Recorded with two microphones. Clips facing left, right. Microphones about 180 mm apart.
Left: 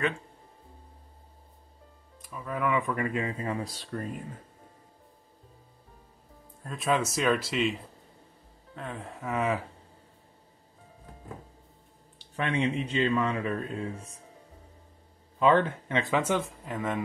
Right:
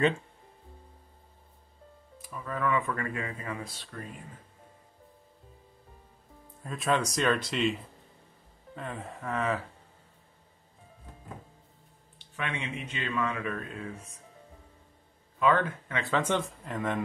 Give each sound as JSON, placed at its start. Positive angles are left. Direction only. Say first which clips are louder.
{"t": 2.1, "sound": "music", "louder": "even", "side_deg": 0}
{"t": 2.4, "sound": "speech", "louder": "left 1 dB", "side_deg": 15}
{"t": 6.6, "sound": "speech", "louder": "left 1 dB", "side_deg": 0}
{"t": 8.7, "sound": "speech", "louder": "even", "side_deg": 0}
{"t": 12.2, "sound": "speech", "louder": "left 7 dB", "side_deg": 35}
{"t": 15.3, "sound": "speech", "louder": "left 3 dB", "side_deg": 25}